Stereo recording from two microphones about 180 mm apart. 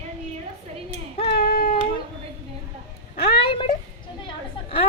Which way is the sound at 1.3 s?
55° left (ahead or behind).